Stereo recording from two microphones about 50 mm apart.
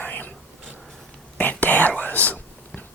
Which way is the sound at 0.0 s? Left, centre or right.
Left.